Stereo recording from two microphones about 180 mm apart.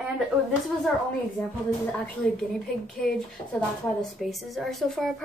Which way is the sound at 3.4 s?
30° left (ahead or behind).